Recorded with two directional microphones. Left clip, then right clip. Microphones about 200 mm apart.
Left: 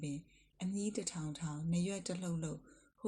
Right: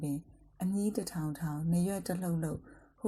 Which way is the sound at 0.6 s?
15° right (ahead or behind).